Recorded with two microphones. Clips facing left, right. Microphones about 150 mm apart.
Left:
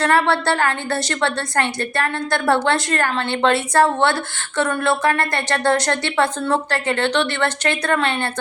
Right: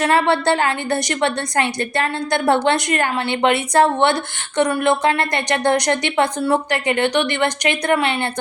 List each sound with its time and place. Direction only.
0.0 s a woman's voice: 15° right (ahead or behind)